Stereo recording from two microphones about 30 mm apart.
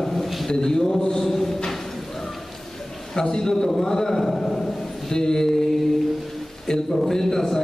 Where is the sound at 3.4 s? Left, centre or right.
Centre.